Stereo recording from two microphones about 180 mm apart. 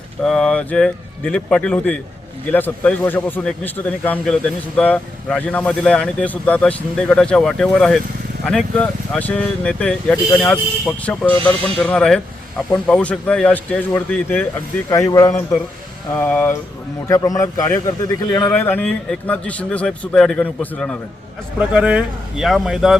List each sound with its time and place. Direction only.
0.2 s a man's voice: 5° left (ahead or behind)
21.6 s speech: 5° right (ahead or behind)